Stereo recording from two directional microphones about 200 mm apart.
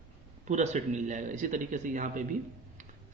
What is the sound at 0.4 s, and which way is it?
A man's voice, 35° right (ahead or behind).